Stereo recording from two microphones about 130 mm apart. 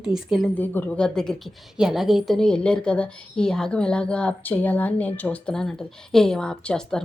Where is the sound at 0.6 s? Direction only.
15° left (ahead or behind).